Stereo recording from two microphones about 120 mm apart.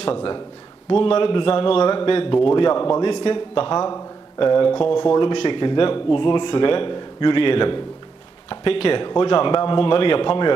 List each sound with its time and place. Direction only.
1.0 s a man's voice: 45° left (ahead or behind)